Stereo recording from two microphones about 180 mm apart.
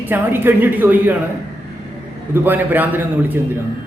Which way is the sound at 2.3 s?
10° right (ahead or behind).